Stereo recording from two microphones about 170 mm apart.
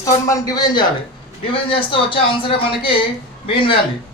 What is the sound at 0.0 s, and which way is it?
Speech, 20° left (ahead or behind).